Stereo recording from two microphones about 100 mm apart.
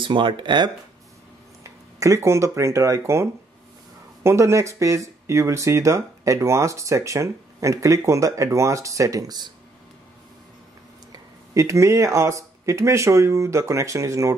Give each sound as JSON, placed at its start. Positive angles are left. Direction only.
{"t": 0.0, "sound": "speech", "side_deg": -55}
{"t": 1.6, "sound": "speech", "side_deg": -30}
{"t": 11.1, "sound": "speech", "side_deg": -30}